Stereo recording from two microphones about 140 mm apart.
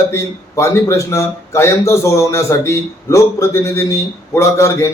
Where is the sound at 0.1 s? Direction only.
20° left (ahead or behind).